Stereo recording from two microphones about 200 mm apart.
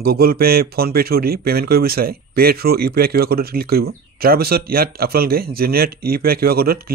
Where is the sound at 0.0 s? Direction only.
50° right (ahead or behind).